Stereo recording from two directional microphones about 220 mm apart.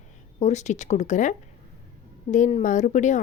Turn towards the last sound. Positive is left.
turn(degrees=35)  # may be behind; listen again after turning